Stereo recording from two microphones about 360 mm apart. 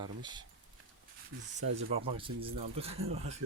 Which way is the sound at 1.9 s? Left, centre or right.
Centre.